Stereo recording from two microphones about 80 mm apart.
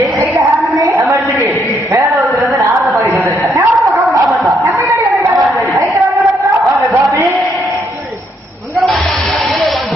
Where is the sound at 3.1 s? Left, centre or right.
Right.